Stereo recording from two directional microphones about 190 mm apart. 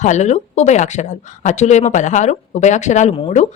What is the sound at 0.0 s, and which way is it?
Speech, 40° left (ahead or behind).